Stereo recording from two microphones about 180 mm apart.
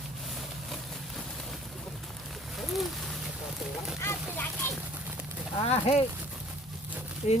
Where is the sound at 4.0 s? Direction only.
15° left (ahead or behind).